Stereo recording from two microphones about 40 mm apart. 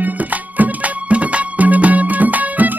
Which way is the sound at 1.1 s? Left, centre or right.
Right.